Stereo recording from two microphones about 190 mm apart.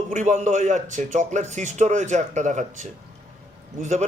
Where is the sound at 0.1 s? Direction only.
40° right (ahead or behind).